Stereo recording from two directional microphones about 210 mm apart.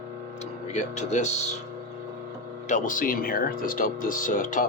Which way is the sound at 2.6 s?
35° left (ahead or behind).